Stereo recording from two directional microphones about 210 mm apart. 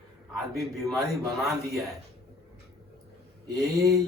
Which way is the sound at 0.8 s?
15° right (ahead or behind).